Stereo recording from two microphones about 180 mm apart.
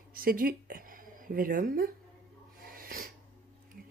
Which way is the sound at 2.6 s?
55° right (ahead or behind).